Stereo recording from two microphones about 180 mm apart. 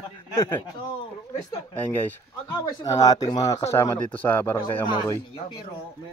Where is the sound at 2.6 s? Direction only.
20° left (ahead or behind).